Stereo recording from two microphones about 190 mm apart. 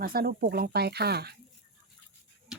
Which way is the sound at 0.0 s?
50° right (ahead or behind).